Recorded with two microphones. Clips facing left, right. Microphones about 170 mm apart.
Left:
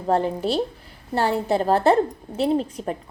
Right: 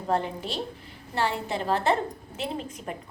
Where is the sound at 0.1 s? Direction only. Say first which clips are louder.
Left 7 dB; 35° left (ahead or behind).